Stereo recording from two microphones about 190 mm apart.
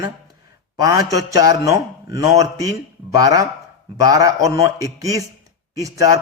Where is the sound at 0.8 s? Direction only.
15° right (ahead or behind).